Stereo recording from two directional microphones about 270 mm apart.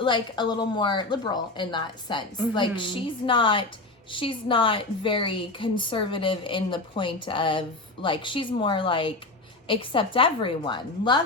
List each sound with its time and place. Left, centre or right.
0.0 s a woman's voice: centre